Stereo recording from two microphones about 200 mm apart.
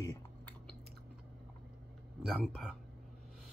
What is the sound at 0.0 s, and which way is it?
Typing, 15° left (ahead or behind).